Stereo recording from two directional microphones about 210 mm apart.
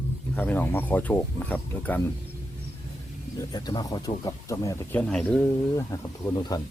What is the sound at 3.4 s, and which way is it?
Speech, 20° left (ahead or behind).